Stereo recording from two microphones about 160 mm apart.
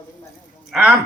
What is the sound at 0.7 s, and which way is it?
Speech, 5° right (ahead or behind).